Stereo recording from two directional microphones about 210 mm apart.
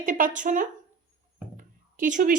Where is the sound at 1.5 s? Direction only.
40° right (ahead or behind).